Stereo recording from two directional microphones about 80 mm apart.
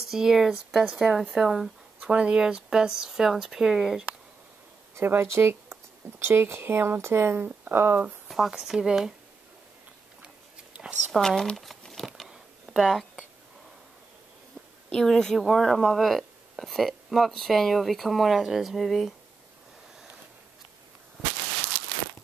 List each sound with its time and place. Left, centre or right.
0.1 s speech: centre
4.9 s speech: right
8.3 s speech: centre
10.2 s biting: centre
11.1 s speech: centre
12.2 s a sound: centre
14.9 s speech: centre